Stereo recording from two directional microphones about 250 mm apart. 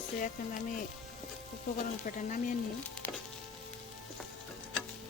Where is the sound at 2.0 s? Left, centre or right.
Left.